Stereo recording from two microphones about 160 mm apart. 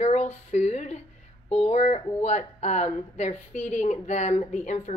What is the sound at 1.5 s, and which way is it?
A woman's voice, 45° left (ahead or behind).